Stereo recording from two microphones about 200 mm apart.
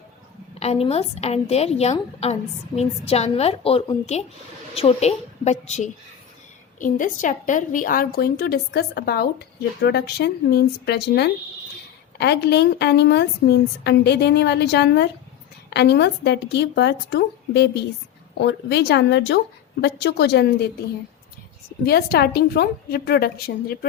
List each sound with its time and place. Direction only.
0.6 s a woman's voice: 30° left (ahead or behind); by 20.7 s 55° left (ahead or behind)
21.8 s a woman's voice: 50° left (ahead or behind)